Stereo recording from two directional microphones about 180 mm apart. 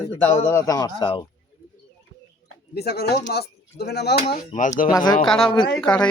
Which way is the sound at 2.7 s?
60° left (ahead or behind).